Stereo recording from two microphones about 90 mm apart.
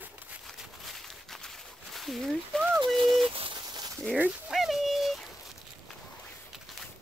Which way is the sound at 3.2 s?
80° right.